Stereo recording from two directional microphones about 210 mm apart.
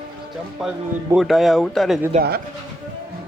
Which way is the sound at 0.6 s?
Centre (ahead or behind).